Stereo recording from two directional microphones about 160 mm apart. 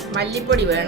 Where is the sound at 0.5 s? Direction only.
90° right.